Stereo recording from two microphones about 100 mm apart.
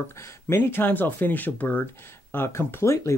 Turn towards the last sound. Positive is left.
turn(degrees=30)  # may be behind; listen again after turning